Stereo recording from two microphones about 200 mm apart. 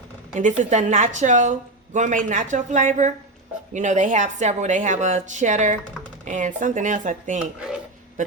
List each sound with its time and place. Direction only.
0.3 s a woman's voice: 40° right (ahead or behind)